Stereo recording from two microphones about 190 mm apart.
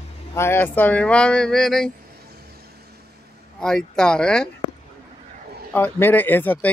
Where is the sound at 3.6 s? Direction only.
5° left (ahead or behind).